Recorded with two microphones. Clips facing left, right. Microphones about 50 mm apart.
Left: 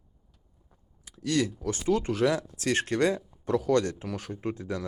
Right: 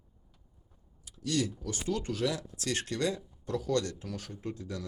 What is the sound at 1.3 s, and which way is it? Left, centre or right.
Speech, left.